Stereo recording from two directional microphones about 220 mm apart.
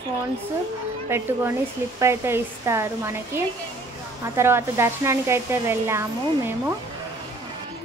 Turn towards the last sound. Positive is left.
turn(degrees=-10)  # may be behind; listen again after turning